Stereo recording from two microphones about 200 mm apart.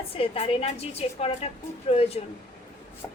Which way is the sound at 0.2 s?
30° left (ahead or behind).